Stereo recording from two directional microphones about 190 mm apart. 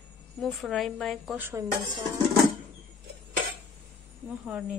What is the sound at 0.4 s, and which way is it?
A woman's voice, centre (ahead or behind).